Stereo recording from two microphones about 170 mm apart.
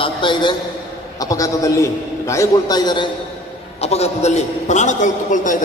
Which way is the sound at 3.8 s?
40° left (ahead or behind).